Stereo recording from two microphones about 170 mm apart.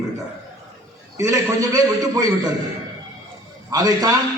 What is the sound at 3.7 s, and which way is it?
Speech, 20° right (ahead or behind).